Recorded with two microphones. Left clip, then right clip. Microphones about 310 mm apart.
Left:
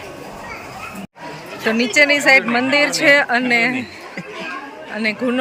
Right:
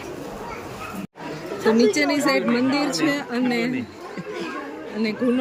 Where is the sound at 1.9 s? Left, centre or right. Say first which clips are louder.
Left 9 dB; centre.